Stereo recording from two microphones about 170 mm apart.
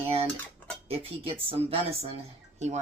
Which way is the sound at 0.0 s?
35° right (ahead or behind).